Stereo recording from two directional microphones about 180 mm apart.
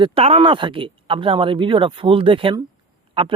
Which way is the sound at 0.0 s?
30° right (ahead or behind).